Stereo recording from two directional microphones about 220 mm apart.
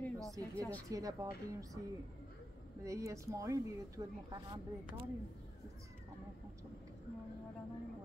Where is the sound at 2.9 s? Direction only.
15° right (ahead or behind).